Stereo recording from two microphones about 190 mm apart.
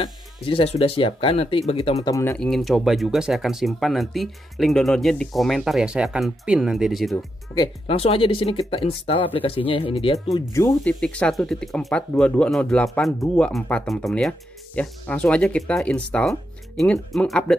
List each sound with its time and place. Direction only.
0.0 s speech: 30° left (ahead or behind)
2.0 s speech: 15° left (ahead or behind)
2.3 s speech: centre (ahead or behind)
7.5 s speech: 30° left (ahead or behind)
10.3 s speech: 20° left (ahead or behind)
10.7 s speech: 5° left (ahead or behind)